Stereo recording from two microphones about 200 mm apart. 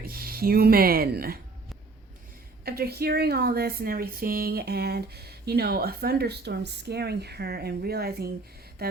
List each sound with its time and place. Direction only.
0.0 s speech: 50° right (ahead or behind)
2.6 s speech: 50° right (ahead or behind)